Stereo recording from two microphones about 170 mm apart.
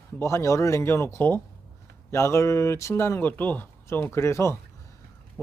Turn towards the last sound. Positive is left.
turn(degrees=15)  # may be behind; listen again after turning